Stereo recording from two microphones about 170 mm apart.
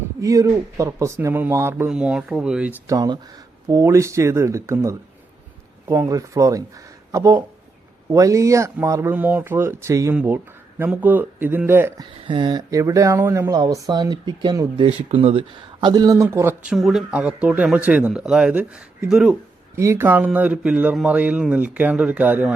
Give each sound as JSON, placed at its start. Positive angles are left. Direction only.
{"t": 0.2, "sound": "speech", "side_deg": -20}
{"t": 2.9, "sound": "speech", "side_deg": -20}
{"t": 12.3, "sound": "speech", "side_deg": -25}
{"t": 16.7, "sound": "speech", "side_deg": 0}
{"t": 19.7, "sound": "speech", "side_deg": -15}